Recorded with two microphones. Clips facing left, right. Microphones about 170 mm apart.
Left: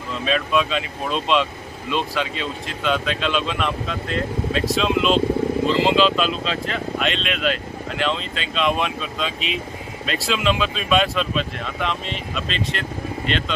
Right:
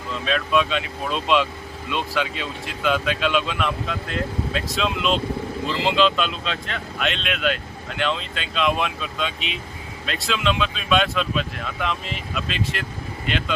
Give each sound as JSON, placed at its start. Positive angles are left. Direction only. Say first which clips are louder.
{"t": 0.3, "sound": "speech", "louder": "left 1 dB", "side_deg": 0}